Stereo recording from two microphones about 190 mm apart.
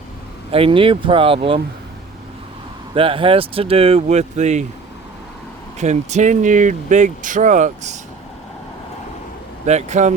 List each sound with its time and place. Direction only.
0.5 s speech: 30° right (ahead or behind)
2.9 s speech: 30° right (ahead or behind)
5.8 s speech: 35° right (ahead or behind)
9.6 s speech: 35° right (ahead or behind)